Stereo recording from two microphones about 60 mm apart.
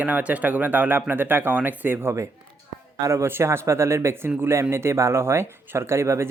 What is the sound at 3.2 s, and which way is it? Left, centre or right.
Speech, right.